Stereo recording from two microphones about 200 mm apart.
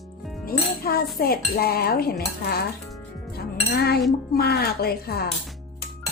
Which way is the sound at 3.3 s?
55° left (ahead or behind).